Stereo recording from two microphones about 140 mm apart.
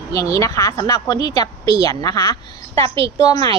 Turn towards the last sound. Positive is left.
turn(degrees=-45)  # may be behind; listen again after turning